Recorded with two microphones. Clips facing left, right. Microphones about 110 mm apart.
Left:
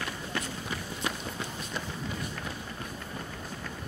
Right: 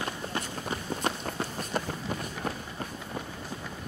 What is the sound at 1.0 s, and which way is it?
Run, 45° right (ahead or behind).